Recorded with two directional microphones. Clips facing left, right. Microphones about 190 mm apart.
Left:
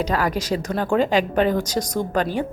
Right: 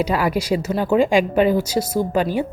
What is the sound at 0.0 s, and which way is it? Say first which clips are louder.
Speech: right 2 dB; 10° right (ahead or behind).